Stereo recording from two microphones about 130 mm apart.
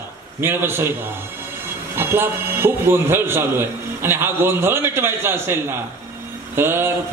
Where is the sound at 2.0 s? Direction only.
20° right (ahead or behind).